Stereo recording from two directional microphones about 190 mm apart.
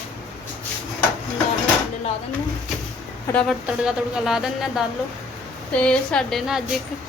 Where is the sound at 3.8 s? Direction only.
5° right (ahead or behind).